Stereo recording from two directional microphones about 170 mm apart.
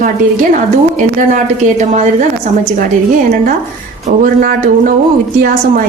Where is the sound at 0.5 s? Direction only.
50° right (ahead or behind).